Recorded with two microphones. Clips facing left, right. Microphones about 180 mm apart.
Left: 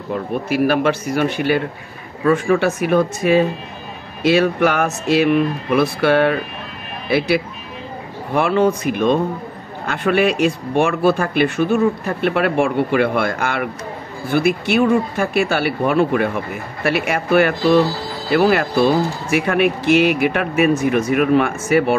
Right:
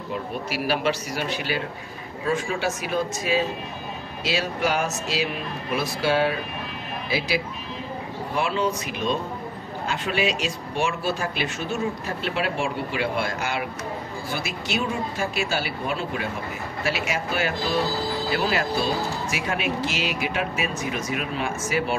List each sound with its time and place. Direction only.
0.1 s speech: 50° left (ahead or behind)